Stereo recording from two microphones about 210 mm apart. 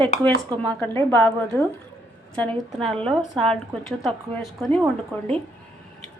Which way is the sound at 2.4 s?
5° left (ahead or behind).